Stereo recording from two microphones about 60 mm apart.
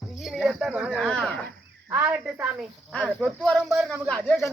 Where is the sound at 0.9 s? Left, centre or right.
Centre.